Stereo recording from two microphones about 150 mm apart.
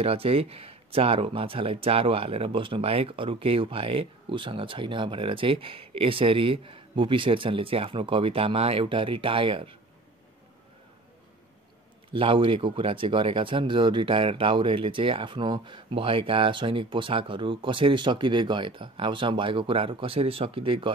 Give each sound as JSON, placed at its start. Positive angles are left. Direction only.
{"t": 0.0, "sound": "speech", "side_deg": -40}
{"t": 12.1, "sound": "speech", "side_deg": -35}